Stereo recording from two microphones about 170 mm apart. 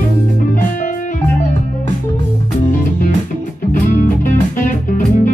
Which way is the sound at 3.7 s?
50° left (ahead or behind).